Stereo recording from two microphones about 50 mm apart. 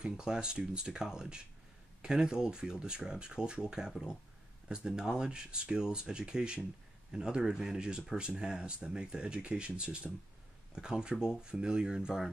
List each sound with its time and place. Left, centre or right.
0.0 s speech: centre
11.1 s speech: left
11.4 s speech: centre